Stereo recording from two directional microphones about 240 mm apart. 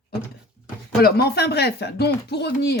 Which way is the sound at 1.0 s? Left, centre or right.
Left.